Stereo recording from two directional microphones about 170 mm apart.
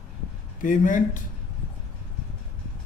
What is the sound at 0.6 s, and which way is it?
Speech, 50° left (ahead or behind).